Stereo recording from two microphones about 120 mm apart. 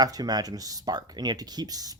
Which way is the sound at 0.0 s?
35° right (ahead or behind).